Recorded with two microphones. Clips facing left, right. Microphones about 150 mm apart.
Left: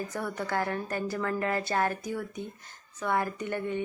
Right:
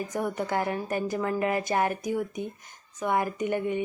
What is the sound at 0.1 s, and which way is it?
A woman's voice, 20° right (ahead or behind).